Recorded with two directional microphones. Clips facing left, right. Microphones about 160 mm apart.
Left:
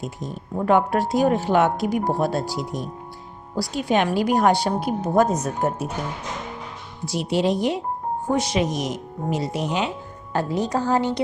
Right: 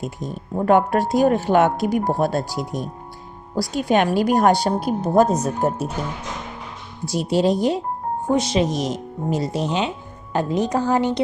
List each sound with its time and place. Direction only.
0.2 s a woman's voice: 50° right (ahead or behind); by 5.9 s 30° right (ahead or behind)
7.0 s a woman's voice: 40° right (ahead or behind)
8.3 s a woman's voice: 25° right (ahead or behind)